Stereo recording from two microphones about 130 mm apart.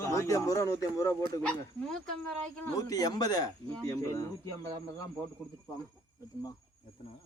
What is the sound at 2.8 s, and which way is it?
A man's voice, 30° left (ahead or behind).